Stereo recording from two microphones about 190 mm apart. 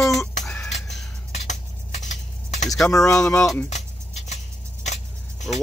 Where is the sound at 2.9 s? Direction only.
15° left (ahead or behind).